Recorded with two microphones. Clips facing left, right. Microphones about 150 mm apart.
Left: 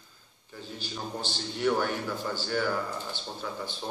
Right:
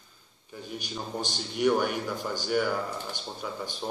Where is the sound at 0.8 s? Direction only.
15° right (ahead or behind).